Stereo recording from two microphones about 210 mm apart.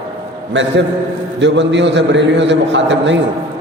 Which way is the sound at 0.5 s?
60° right (ahead or behind).